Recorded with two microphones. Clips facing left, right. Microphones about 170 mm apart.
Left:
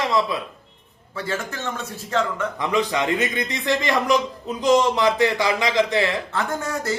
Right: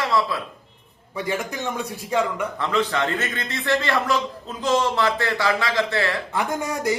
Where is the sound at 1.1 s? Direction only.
15° right (ahead or behind).